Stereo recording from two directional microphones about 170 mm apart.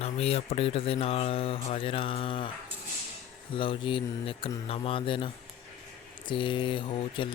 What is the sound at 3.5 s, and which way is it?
Speech, 30° left (ahead or behind).